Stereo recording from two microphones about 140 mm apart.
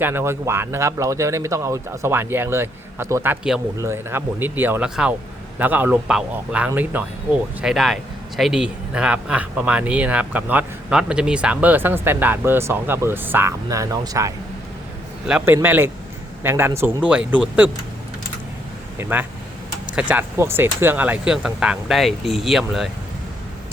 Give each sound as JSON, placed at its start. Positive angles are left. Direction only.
{"t": 0.0, "sound": "speech", "side_deg": -15}
{"t": 7.6, "sound": "speech", "side_deg": 0}
{"t": 15.3, "sound": "speech", "side_deg": -15}
{"t": 18.9, "sound": "speech", "side_deg": -15}